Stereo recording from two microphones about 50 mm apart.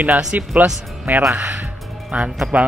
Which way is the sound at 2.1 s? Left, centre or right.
Right.